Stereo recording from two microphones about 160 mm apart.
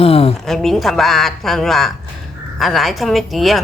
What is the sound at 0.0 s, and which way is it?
Speech, 40° left (ahead or behind).